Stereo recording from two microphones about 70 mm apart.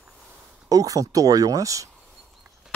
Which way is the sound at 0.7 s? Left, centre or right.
Right.